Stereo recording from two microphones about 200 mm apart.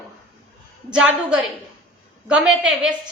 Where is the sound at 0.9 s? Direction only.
5° right (ahead or behind).